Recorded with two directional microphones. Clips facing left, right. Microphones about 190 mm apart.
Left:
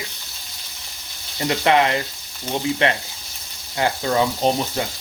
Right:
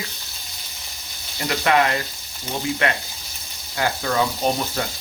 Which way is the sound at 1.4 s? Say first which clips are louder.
Left 2 dB; 25° left (ahead or behind).